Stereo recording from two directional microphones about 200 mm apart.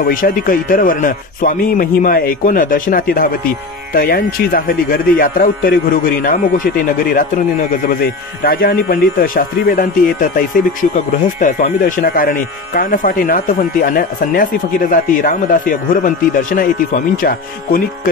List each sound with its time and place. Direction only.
0.0 s speech: 45° left (ahead or behind)